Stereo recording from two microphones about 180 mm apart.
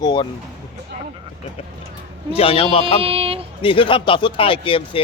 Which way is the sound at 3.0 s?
30° right (ahead or behind).